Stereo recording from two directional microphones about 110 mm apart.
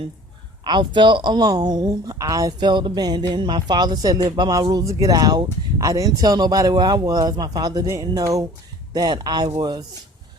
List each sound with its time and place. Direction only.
0.6 s speech: 45° right (ahead or behind)